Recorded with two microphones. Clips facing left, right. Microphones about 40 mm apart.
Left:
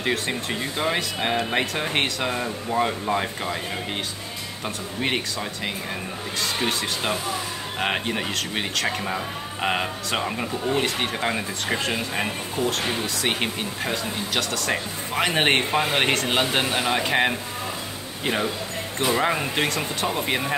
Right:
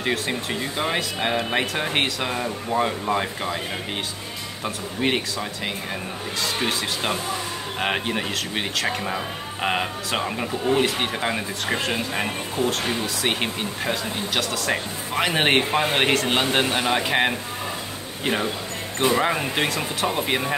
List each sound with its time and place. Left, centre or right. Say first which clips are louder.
0.0 s speech: even; centre
6.4 s speech: even; centre